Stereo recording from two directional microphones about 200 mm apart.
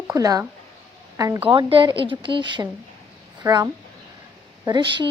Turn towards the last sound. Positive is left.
turn(degrees=-25)  # may be behind; listen again after turning